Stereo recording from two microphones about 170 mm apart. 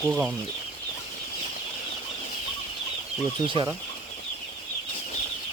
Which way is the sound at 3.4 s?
30° right (ahead or behind).